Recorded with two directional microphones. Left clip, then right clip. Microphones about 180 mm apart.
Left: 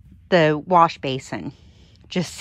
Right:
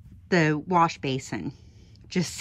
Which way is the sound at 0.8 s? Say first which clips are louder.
Left 6 dB; 5° left (ahead or behind).